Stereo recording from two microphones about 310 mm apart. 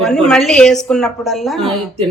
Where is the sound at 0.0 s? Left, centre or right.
Centre.